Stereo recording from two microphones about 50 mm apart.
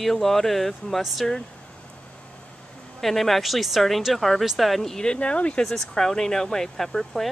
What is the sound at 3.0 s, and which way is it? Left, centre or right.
Speech, centre.